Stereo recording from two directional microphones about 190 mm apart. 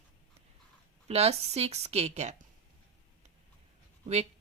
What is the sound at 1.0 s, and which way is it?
Speech, 35° right (ahead or behind).